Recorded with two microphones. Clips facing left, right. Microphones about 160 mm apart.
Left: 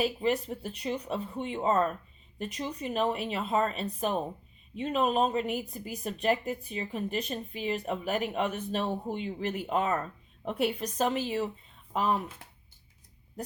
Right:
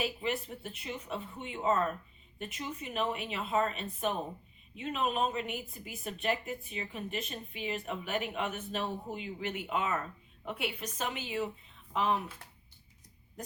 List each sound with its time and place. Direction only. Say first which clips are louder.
0.0 s a woman's voice: left 6 dB; 35° left (ahead or behind)